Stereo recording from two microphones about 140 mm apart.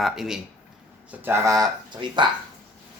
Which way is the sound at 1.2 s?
20° right (ahead or behind).